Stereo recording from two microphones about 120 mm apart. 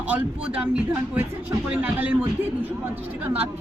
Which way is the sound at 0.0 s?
10° right (ahead or behind).